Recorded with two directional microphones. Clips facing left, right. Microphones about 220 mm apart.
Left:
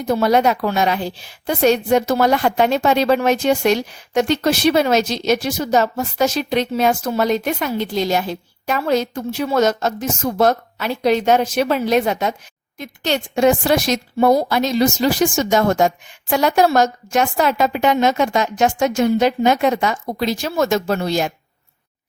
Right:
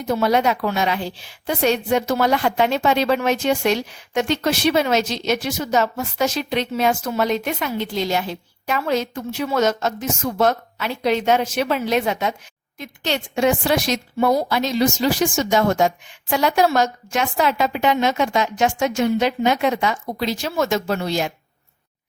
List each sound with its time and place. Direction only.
0.1 s a woman's voice: 40° left (ahead or behind)